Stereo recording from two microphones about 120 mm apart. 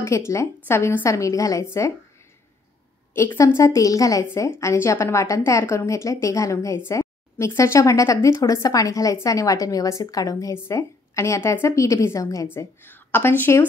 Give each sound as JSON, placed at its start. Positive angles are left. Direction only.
{"t": 0.0, "sound": "a woman's voice", "side_deg": 25}
{"t": 3.2, "sound": "a woman's voice", "side_deg": 20}